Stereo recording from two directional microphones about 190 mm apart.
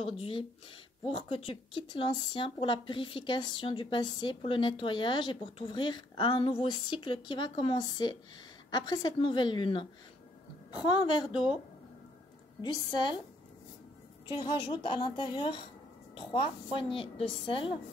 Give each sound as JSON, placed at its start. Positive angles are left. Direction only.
{"t": 0.0, "sound": "a woman's voice", "side_deg": 30}
{"t": 12.6, "sound": "a woman's voice", "side_deg": 25}
{"t": 14.4, "sound": "a woman's voice", "side_deg": 25}